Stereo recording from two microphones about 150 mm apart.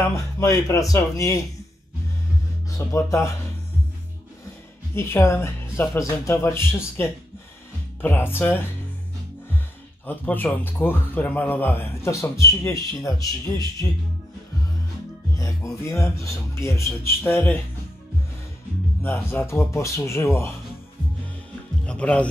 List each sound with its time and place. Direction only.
0.1 s a man's voice: 20° left (ahead or behind)
2.7 s a man's voice: 15° left (ahead or behind)
4.9 s speech: 15° left (ahead or behind)
10.0 s speech: 15° left (ahead or behind)
15.3 s a man's voice: 20° left (ahead or behind)
19.3 s speech: 15° left (ahead or behind)
21.8 s speech: 10° left (ahead or behind)